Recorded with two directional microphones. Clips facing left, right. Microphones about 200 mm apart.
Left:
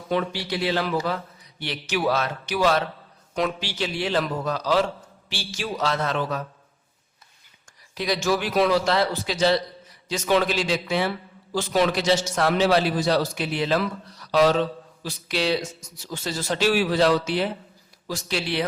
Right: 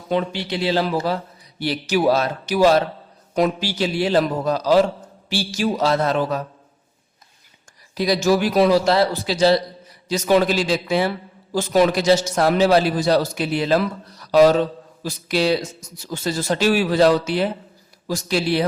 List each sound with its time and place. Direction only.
0.1 s a man's voice: 20° right (ahead or behind)
7.9 s a man's voice: 40° right (ahead or behind)